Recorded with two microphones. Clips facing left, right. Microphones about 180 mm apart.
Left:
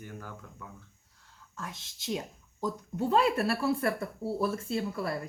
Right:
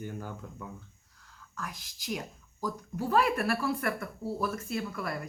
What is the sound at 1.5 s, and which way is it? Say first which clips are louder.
A woman's voice: right 1 dB; 25° left (ahead or behind).